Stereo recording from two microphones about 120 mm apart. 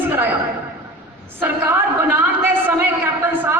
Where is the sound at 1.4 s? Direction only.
15° right (ahead or behind).